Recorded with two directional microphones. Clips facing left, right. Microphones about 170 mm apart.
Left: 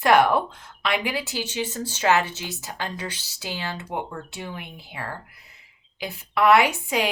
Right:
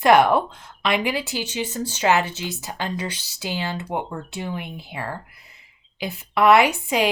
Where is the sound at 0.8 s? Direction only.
20° right (ahead or behind).